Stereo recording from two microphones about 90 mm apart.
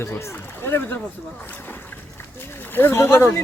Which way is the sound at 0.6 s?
25° left (ahead or behind).